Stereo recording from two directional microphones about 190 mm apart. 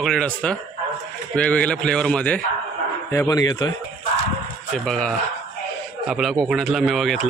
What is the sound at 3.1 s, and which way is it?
Speech, 15° left (ahead or behind).